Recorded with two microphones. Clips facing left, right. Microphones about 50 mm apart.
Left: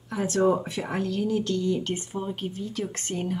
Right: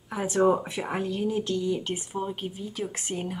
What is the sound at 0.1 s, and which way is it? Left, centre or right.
A woman's voice, centre.